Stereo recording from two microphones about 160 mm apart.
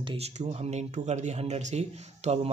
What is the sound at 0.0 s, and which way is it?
Speech, 30° right (ahead or behind).